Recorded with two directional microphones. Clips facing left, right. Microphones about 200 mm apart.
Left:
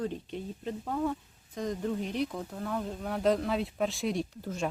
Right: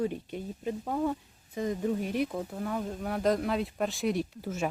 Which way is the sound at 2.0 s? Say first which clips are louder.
Right 2 dB; 50° right (ahead or behind).